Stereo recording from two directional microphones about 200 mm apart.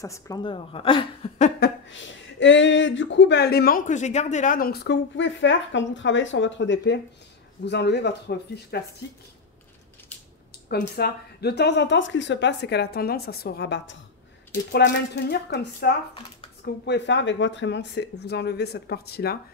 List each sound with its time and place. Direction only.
0.0 s a woman's voice: 15° left (ahead or behind)
2.4 s speech: 65° left (ahead or behind)
10.7 s speech: 50° left (ahead or behind)